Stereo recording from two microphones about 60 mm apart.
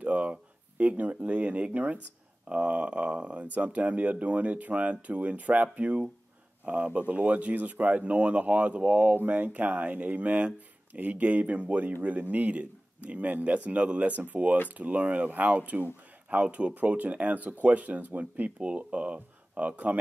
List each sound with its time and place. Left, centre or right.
0.0 s speech: right